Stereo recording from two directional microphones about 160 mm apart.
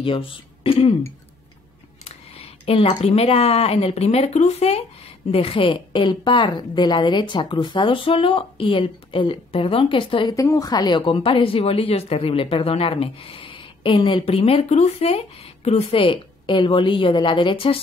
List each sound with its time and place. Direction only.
0.0 s speech: 35° left (ahead or behind)
2.0 s a woman's voice: 40° left (ahead or behind)